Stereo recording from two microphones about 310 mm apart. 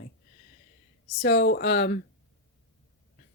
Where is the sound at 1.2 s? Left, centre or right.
Left.